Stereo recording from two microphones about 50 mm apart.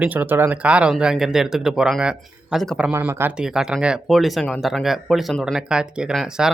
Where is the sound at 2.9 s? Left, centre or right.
Right.